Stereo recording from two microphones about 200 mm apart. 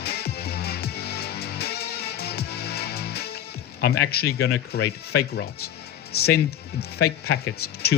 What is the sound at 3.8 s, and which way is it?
Speech, 50° left (ahead or behind).